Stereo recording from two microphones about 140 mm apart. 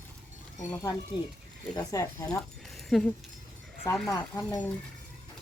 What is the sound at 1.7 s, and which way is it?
Speech, 25° left (ahead or behind).